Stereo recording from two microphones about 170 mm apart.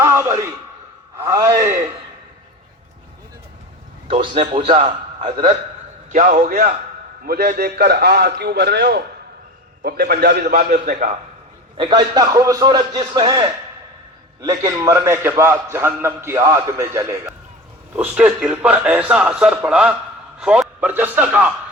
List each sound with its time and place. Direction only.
0.0 s a man's voice: 15° right (ahead or behind)
4.1 s a man's voice: 35° right (ahead or behind)
6.1 s a man's voice: 50° right (ahead or behind)
7.3 s a man's voice: 65° right (ahead or behind)
10.5 s a man's voice: 50° right (ahead or behind)
11.8 s a man's voice: 25° right (ahead or behind); by 21.5 s 10° right (ahead or behind)